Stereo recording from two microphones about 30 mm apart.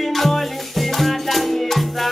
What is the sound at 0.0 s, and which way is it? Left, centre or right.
Music, centre.